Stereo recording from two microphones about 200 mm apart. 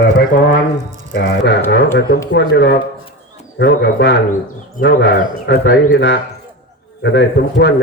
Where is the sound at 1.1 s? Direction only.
50° left (ahead or behind).